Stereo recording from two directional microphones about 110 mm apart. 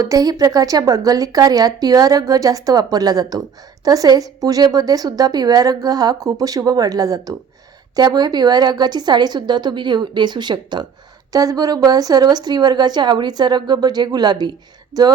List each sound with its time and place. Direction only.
0.0 s a woman's voice: 30° right (ahead or behind)